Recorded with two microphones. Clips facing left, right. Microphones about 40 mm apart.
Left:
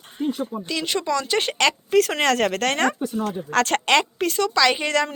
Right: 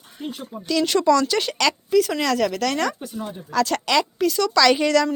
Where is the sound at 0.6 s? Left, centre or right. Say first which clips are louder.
Right 9 dB; left.